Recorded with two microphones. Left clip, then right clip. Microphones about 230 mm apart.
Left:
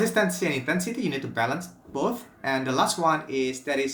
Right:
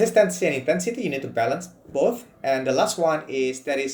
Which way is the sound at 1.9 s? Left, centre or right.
Left.